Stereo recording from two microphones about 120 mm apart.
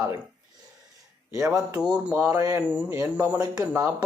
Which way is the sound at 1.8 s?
10° right (ahead or behind).